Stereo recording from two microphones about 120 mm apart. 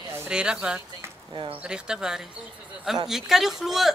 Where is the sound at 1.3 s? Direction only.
45° right (ahead or behind).